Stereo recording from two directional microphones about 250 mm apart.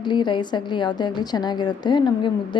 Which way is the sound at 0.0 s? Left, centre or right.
Centre.